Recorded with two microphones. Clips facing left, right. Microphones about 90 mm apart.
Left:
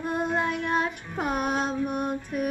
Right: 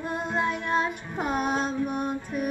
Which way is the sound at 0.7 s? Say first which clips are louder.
Even; 5° left (ahead or behind).